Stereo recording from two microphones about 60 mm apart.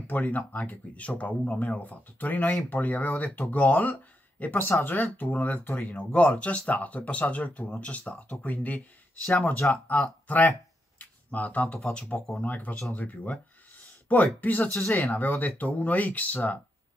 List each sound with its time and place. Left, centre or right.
0.0 s speech: left
4.6 s speech: left
4.9 s speech: left
11.0 s a sound: left
11.8 s speech: centre